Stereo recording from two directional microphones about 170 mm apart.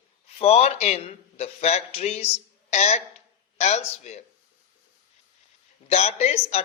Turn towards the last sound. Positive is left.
turn(degrees=40)  # may be behind; listen again after turning